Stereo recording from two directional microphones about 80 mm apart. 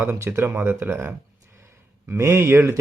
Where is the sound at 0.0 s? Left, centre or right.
Right.